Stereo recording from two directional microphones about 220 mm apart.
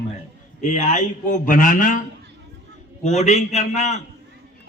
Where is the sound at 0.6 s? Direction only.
35° left (ahead or behind).